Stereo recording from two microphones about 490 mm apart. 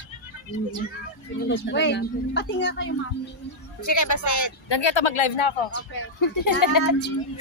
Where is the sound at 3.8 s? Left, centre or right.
Left.